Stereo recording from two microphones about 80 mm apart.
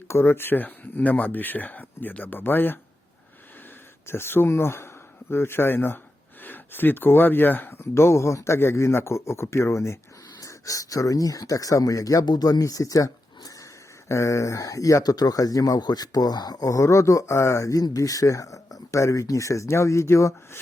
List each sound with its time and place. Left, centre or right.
0.1 s speech: left
4.0 s speech: left
10.4 s speech: left